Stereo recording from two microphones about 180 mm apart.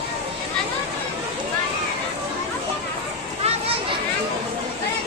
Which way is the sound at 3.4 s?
35° right (ahead or behind).